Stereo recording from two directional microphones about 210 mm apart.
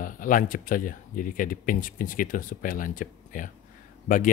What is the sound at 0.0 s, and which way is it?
Speech, 40° left (ahead or behind).